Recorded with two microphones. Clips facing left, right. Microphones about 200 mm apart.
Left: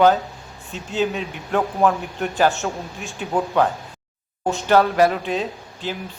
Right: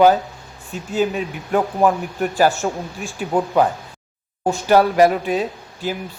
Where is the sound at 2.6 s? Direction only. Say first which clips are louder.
Right 3 dB; 10° right (ahead or behind).